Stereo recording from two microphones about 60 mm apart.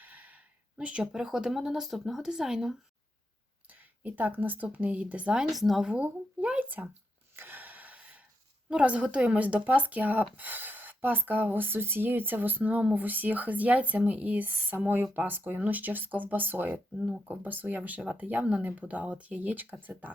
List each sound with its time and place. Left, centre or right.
0.0 s speech: right; by 2.7 s centre
3.7 s speech: right
5.5 s speech: centre
5.9 s speech: right
7.3 s gasp: right
8.7 s speech: right
17.0 s speech: centre
17.2 s speech: right